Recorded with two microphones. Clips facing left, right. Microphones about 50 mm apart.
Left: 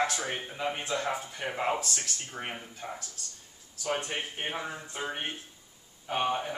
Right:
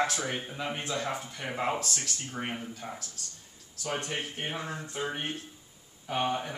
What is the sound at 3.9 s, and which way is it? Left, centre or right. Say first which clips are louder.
Speech: left 1 dB; left.